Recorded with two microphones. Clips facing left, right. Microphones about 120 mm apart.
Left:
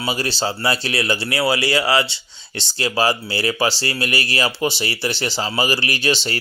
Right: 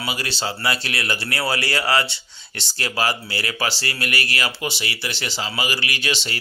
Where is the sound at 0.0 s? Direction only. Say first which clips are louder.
Left 5 dB; 35° left (ahead or behind).